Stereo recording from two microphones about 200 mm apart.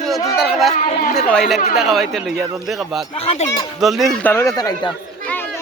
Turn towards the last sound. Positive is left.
turn(degrees=20)  # may be behind; listen again after turning